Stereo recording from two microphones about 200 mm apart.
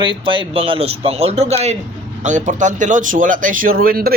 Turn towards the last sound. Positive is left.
turn(degrees=-45)  # may be behind; listen again after turning